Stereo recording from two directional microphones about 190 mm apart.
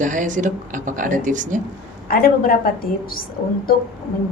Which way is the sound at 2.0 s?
50° left (ahead or behind).